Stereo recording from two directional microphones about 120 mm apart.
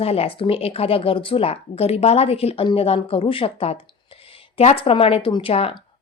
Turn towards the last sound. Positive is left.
turn(degrees=50)  # may be behind; listen again after turning